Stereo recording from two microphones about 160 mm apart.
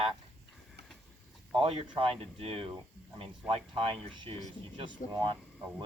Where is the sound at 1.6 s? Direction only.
35° right (ahead or behind).